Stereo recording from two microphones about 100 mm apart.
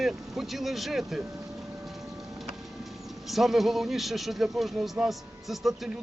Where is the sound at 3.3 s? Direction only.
Centre (ahead or behind).